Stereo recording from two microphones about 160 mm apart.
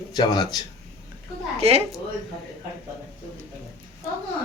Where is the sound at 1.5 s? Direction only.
40° right (ahead or behind).